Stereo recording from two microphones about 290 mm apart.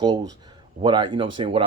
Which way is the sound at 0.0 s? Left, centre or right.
Centre.